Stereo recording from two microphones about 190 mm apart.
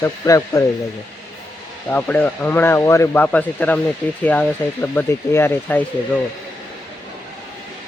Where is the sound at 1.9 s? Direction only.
10° left (ahead or behind).